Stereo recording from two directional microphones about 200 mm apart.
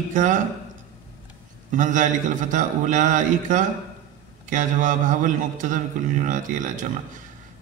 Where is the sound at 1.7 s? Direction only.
40° right (ahead or behind).